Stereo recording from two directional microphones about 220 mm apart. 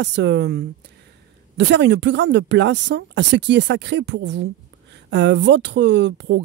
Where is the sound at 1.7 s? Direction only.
55° right (ahead or behind).